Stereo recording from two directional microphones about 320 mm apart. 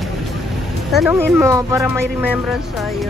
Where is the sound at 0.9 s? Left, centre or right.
Centre.